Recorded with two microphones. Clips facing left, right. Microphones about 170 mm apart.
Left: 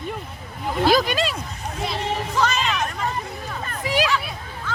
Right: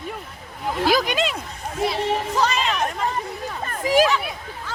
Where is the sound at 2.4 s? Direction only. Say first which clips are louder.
Left 2 dB; 30° right (ahead or behind).